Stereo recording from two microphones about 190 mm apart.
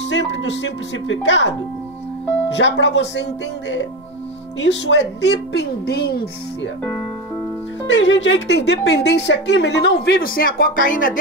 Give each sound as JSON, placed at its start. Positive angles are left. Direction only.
{"t": 0.1, "sound": "speech", "side_deg": 70}
{"t": 2.5, "sound": "a woman's voice", "side_deg": 65}
{"t": 7.8, "sound": "a woman's voice", "side_deg": 75}